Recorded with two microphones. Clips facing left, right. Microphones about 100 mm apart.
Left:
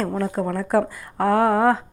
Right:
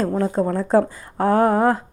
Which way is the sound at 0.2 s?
25° right (ahead or behind).